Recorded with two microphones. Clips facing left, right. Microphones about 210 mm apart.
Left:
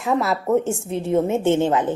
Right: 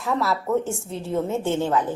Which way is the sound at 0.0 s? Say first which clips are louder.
Left 3 dB; 20° left (ahead or behind).